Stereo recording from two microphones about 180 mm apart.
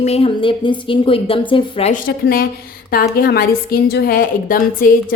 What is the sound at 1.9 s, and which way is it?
A woman's voice, 55° left (ahead or behind).